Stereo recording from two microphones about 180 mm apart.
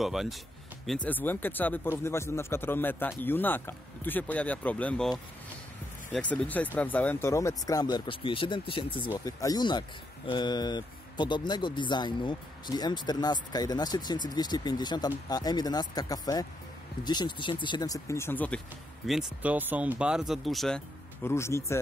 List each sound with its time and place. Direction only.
0.0 s speech: centre (ahead or behind)
1.0 s speech: 10° left (ahead or behind)
6.1 s speech: 5° left (ahead or behind)
19.0 s speech: 5° right (ahead or behind)
21.2 s speech: 15° left (ahead or behind)